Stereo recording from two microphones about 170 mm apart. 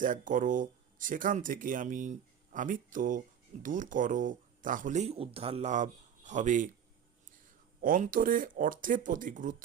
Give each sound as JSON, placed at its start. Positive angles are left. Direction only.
{"t": 0.0, "sound": "speech", "side_deg": -50}
{"t": 7.8, "sound": "speech", "side_deg": -55}